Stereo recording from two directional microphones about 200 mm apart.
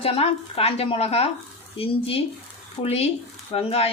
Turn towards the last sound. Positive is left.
turn(degrees=30)  # may be behind; listen again after turning